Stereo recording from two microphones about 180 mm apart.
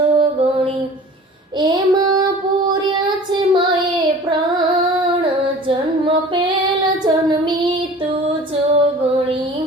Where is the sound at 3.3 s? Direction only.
25° right (ahead or behind).